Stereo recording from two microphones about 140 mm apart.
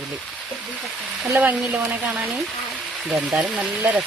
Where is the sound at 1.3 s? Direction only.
10° right (ahead or behind).